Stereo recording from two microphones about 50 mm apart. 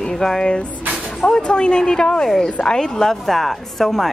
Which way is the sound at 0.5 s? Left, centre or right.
Left.